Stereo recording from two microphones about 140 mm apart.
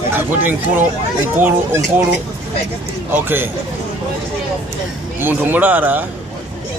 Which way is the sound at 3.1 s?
15° right (ahead or behind).